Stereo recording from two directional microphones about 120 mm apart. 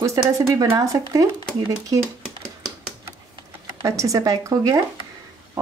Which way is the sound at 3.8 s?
30° right (ahead or behind).